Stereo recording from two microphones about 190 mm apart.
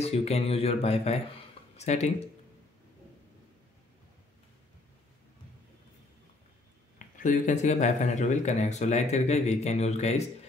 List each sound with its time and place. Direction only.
0.0 s speech: 35° left (ahead or behind)
7.0 s speech: 40° left (ahead or behind)